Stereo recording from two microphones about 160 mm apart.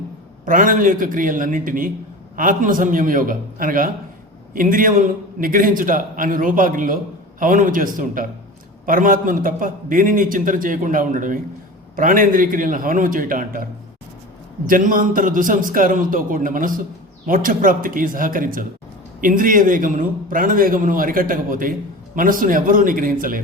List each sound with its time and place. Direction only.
0.4 s a man's voice: 55° right (ahead or behind)
14.7 s a man's voice: 60° right (ahead or behind)